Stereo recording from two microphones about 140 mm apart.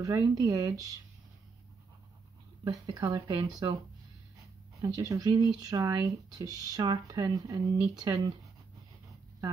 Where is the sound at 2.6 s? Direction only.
25° right (ahead or behind).